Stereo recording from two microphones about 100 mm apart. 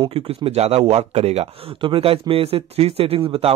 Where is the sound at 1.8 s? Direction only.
65° right (ahead or behind).